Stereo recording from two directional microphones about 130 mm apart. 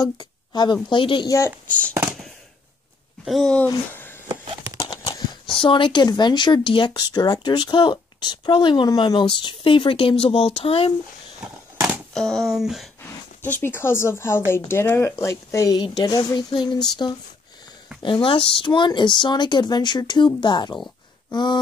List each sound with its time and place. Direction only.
0.0 s a woman's voice: 30° left (ahead or behind)
3.3 s speech: centre (ahead or behind)
4.3 s a sound: 30° right (ahead or behind)
4.7 s horse: 35° left (ahead or behind)
5.6 s speech: 40° left (ahead or behind)
11.4 s a sound: 15° right (ahead or behind)
12.1 s speech: 5° left (ahead or behind)
13.4 s speech: 15° left (ahead or behind); by 20.7 s 35° left (ahead or behind)
21.3 s a sound: 35° left (ahead or behind)